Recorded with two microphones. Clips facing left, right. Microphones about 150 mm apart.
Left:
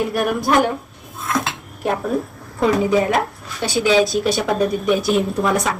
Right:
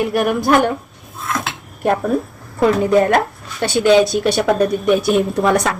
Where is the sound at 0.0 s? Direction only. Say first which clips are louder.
Right 3 dB; centre (ahead or behind).